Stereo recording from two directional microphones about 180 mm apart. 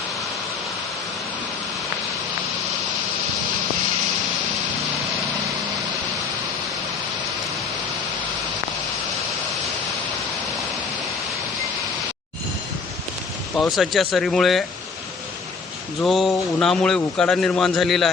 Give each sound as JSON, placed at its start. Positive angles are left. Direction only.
{"t": 13.6, "sound": "a man's voice", "side_deg": 0}
{"t": 16.0, "sound": "a man's voice", "side_deg": 0}